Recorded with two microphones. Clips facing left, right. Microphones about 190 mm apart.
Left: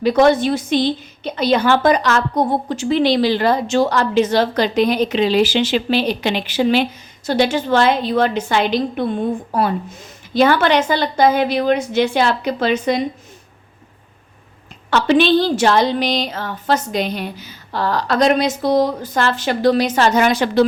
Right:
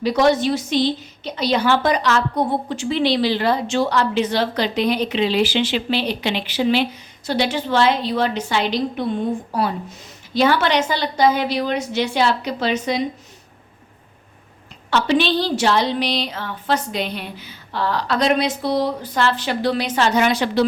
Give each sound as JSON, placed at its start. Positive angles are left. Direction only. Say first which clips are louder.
{"t": 0.0, "sound": "a woman's voice", "louder": "left 3 dB", "side_deg": 55}
{"t": 14.8, "sound": "a woman's voice", "louder": "left 4 dB", "side_deg": 55}